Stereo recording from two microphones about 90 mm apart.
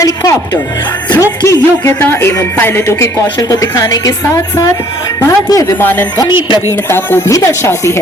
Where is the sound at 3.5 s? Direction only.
35° left (ahead or behind).